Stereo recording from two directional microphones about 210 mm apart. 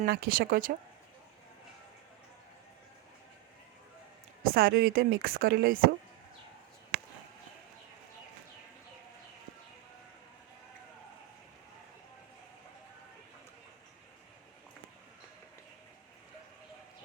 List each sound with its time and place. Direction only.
0.0 s a woman's voice: 45° right (ahead or behind)
4.4 s a woman's voice: 45° right (ahead or behind)